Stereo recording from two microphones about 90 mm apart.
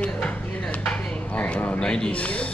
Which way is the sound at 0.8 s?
15° left (ahead or behind).